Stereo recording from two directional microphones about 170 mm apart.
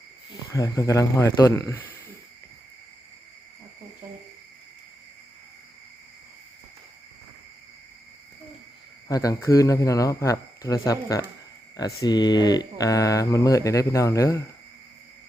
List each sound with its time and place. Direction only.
0.5 s speech: 20° left (ahead or behind)
9.0 s mantra: 20° left (ahead or behind)